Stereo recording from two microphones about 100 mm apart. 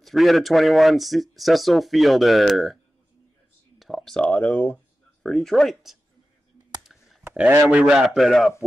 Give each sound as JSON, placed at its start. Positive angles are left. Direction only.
{"t": 0.0, "sound": "speech", "side_deg": 0}
{"t": 3.8, "sound": "a sound", "side_deg": 0}
{"t": 4.2, "sound": "speech", "side_deg": 15}
{"t": 5.2, "sound": "speech", "side_deg": 5}
{"t": 6.9, "sound": "clicking", "side_deg": 0}
{"t": 7.2, "sound": "speech", "side_deg": -20}
{"t": 7.8, "sound": "speech", "side_deg": -5}